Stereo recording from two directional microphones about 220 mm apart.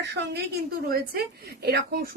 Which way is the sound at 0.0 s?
50° right (ahead or behind).